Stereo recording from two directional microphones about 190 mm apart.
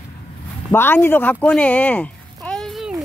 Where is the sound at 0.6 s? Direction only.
10° left (ahead or behind).